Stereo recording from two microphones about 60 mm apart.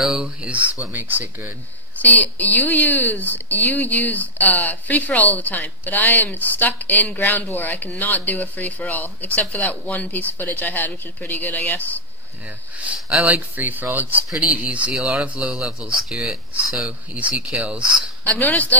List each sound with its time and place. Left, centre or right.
0.2 s speech: right
0.9 s speech: right
2.0 s speech: left
13.2 s speech: right
14.4 s speech: right; by 16.3 s centre
17.1 s speech: centre
18.2 s speech: left